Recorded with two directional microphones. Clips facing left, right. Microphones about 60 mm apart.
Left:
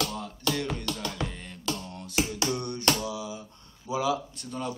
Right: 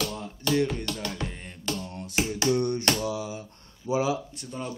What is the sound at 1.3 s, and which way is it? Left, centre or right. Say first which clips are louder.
Computer keyboard: even; right.